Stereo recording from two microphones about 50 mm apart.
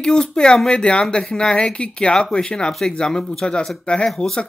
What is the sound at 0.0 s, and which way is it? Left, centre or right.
A woman's voice, centre.